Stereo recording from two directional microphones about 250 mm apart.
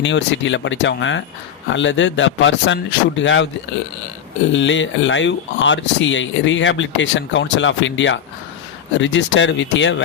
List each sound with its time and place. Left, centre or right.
0.0 s speech: left
4.5 s speech: left